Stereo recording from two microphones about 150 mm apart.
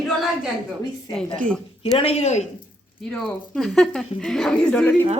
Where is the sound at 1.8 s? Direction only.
40° left (ahead or behind).